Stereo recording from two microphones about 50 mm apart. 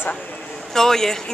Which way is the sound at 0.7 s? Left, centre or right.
Centre.